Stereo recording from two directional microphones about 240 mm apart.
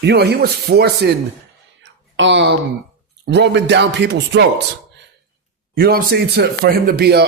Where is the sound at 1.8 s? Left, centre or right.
Right.